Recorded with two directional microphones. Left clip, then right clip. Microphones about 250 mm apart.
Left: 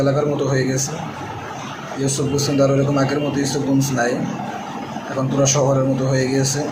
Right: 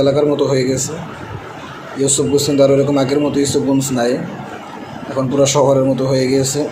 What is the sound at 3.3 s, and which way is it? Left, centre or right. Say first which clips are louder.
Speech: right 5 dB; right.